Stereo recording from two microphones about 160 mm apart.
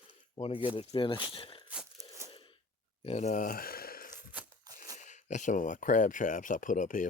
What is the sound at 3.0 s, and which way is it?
Speech, 45° left (ahead or behind).